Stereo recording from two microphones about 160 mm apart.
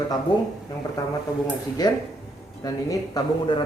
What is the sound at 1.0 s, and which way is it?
Speech, 20° left (ahead or behind).